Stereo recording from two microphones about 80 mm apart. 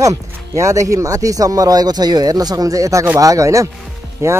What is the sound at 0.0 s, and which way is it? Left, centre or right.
Speech, right.